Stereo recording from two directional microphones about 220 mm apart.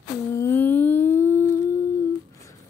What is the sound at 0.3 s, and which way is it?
Humming, 10° left (ahead or behind).